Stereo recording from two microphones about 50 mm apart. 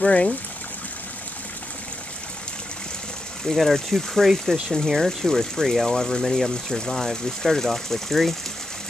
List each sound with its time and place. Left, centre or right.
0.0 s speech: left
3.4 s speech: centre